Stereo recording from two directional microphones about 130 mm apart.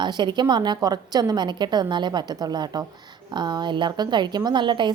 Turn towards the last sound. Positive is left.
turn(degrees=-35)  # may be behind; listen again after turning